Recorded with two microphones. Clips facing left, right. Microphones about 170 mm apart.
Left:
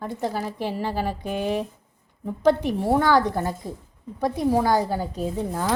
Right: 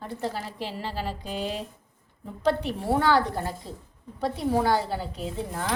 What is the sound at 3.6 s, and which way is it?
Speech, 50° left (ahead or behind).